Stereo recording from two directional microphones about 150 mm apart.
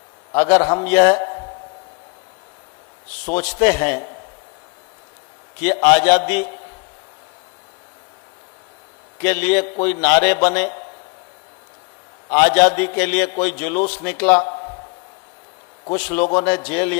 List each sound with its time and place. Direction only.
0.3 s a man's voice: 15° left (ahead or behind)
3.2 s a man's voice: 10° left (ahead or behind)
5.5 s a man's voice: 10° left (ahead or behind)
9.1 s a man's voice: 10° left (ahead or behind)
12.3 s a man's voice: 15° left (ahead or behind)
16.1 s a man's voice: 15° left (ahead or behind)